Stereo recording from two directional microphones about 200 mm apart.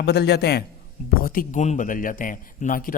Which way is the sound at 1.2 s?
40° left (ahead or behind).